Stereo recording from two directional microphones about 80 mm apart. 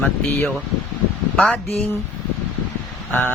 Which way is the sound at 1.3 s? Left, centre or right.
Centre.